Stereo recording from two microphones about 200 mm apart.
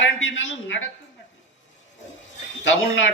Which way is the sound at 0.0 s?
65° left (ahead or behind).